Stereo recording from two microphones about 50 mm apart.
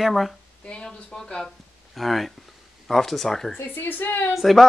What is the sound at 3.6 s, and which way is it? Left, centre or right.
Speech, left.